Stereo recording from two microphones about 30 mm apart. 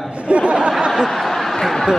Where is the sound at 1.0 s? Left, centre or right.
Centre.